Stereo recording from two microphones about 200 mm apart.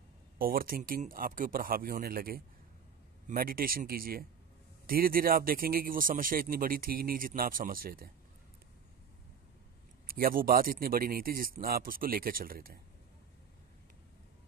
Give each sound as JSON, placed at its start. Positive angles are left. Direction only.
{"t": 0.4, "sound": "speech", "side_deg": -45}
{"t": 10.0, "sound": "speech", "side_deg": -45}